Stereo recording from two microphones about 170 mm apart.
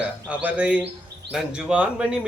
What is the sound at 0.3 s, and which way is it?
A man's voice, 5° right (ahead or behind).